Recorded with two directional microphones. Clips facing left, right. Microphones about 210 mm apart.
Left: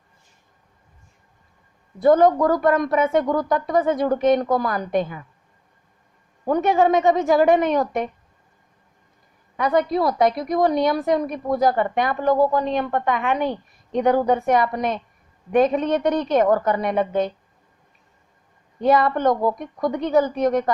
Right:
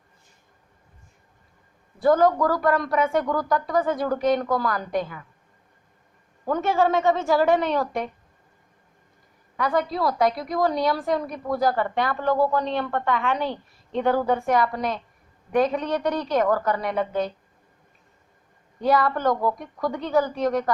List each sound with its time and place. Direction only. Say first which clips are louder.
2.0 s a woman's voice: left 4 dB; 20° left (ahead or behind)
6.4 s a woman's voice: left 4 dB; 20° left (ahead or behind)
9.6 s a woman's voice: left 4 dB; 20° left (ahead or behind)
18.8 s a woman's voice: left 3 dB; 20° left (ahead or behind)